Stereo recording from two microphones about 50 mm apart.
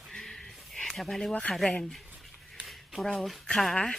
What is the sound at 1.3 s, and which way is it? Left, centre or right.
Speech, left.